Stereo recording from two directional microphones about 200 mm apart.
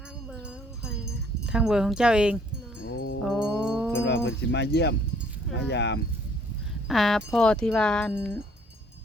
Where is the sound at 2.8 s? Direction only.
50° left (ahead or behind).